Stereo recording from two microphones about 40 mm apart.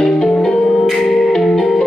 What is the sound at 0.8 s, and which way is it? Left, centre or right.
Music, centre.